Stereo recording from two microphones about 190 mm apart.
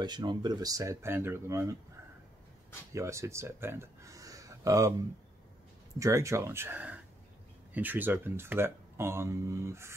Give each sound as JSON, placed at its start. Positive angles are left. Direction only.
{"t": 0.0, "sound": "speech", "side_deg": -25}
{"t": 2.9, "sound": "speech", "side_deg": -15}
{"t": 5.9, "sound": "speech", "side_deg": -15}